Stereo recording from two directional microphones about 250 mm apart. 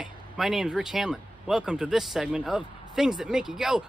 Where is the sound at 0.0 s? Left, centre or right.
Centre.